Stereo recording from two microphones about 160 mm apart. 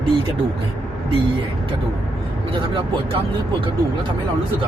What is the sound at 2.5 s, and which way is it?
Speech, 35° right (ahead or behind).